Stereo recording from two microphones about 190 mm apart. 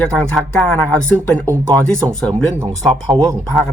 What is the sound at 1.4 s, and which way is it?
Speech, 15° right (ahead or behind).